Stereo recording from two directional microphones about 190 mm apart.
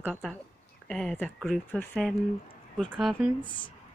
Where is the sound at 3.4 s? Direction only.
25° left (ahead or behind).